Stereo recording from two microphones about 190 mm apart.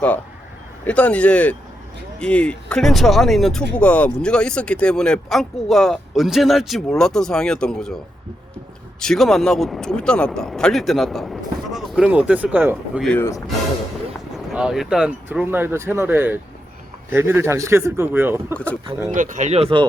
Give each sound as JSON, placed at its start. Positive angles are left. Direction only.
{"t": 0.9, "sound": "speech", "side_deg": 5}
{"t": 9.0, "sound": "speech", "side_deg": 0}
{"t": 13.1, "sound": "speech", "side_deg": 10}
{"t": 14.3, "sound": "speech", "side_deg": -5}
{"t": 19.1, "sound": "speech", "side_deg": -40}